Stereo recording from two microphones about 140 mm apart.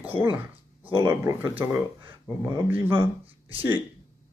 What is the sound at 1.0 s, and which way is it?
Speech, 20° right (ahead or behind).